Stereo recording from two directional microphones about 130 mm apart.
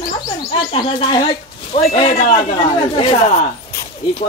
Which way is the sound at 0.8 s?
35° left (ahead or behind).